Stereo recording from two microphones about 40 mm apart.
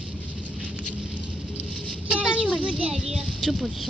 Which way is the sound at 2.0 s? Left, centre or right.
Right.